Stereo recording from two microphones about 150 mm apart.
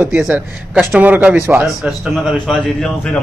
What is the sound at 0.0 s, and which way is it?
A man's voice, 10° right (ahead or behind).